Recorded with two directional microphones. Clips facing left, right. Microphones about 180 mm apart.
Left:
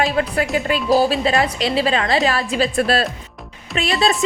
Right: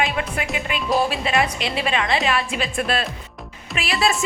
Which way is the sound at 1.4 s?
30° left (ahead or behind).